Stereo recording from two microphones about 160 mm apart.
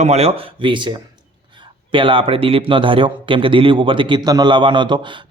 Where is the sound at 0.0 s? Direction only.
40° right (ahead or behind).